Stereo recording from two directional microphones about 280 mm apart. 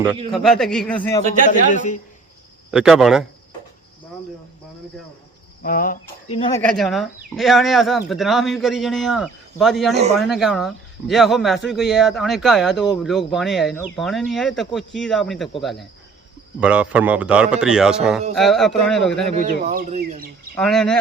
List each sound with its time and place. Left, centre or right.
0.3 s a man's voice: centre
1.3 s a man's voice: left
2.7 s a man's voice: centre
5.6 s speech: left
6.3 s speech: centre
6.6 s a man's voice: centre
19.3 s speech: right
20.6 s a man's voice: centre